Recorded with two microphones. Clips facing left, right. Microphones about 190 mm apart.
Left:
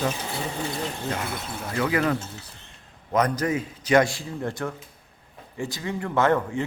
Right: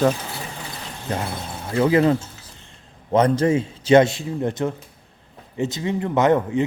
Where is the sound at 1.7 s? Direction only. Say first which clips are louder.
Right 7 dB; 25° right (ahead or behind).